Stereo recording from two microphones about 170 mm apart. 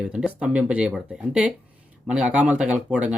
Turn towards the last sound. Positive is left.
turn(degrees=-5)  # may be behind; listen again after turning